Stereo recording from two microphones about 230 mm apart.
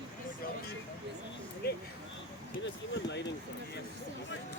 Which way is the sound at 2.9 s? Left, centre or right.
Left.